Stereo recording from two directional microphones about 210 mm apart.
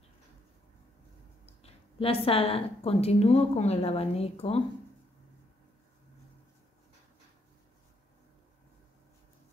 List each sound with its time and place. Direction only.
1.4 s a woman's voice: 30° left (ahead or behind)